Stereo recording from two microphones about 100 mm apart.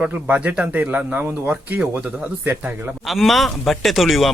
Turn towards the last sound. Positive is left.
turn(degrees=0)  # may be behind; listen again after turning